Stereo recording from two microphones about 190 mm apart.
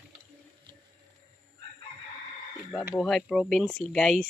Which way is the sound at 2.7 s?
10° right (ahead or behind).